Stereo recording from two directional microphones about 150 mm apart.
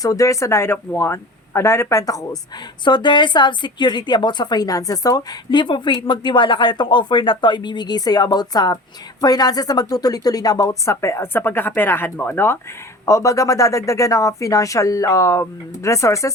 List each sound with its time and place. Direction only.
0.0 s a woman's voice: 25° left (ahead or behind)